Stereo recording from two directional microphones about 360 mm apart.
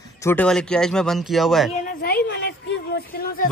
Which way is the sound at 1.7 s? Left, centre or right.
Left.